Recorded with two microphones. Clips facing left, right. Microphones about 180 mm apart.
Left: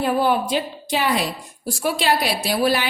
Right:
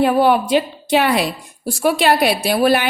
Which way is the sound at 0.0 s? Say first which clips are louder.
Right 5 dB; 65° right (ahead or behind).